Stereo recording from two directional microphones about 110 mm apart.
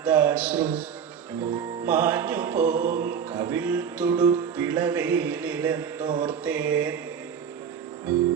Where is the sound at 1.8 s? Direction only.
15° right (ahead or behind).